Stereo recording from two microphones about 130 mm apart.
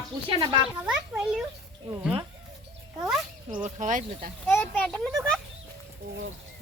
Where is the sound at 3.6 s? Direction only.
75° right (ahead or behind).